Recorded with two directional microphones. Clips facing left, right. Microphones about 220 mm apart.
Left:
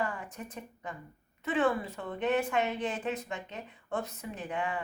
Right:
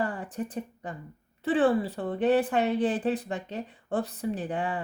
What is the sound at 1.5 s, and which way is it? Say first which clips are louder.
A woman's voice: right 6 dB; 35° right (ahead or behind).